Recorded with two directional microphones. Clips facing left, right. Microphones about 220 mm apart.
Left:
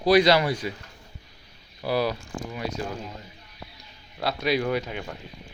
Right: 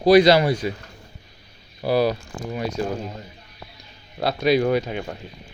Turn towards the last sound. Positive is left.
turn(degrees=-35)  # may be behind; listen again after turning